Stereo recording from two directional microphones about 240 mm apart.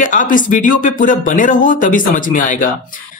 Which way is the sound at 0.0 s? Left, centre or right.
Left.